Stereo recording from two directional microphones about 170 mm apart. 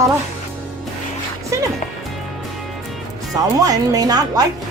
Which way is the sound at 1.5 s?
15° right (ahead or behind).